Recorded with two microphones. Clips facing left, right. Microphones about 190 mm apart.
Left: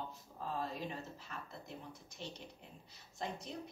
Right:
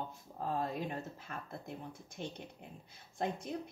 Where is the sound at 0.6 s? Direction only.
50° right (ahead or behind).